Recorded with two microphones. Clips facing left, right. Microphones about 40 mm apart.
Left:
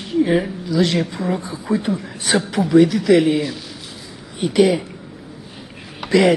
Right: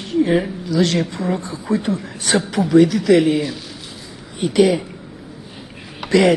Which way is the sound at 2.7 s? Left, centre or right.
Centre.